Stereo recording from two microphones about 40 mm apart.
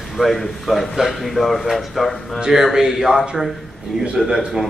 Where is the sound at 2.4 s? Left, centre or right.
Centre.